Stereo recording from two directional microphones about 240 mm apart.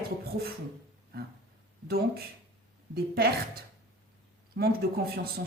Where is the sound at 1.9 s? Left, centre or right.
Right.